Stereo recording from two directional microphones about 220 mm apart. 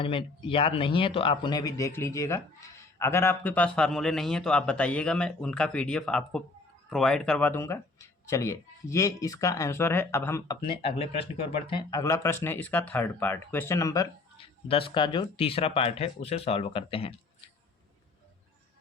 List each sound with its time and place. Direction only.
0.0 s speech: 25° left (ahead or behind)
10.7 s speech: 25° left (ahead or behind)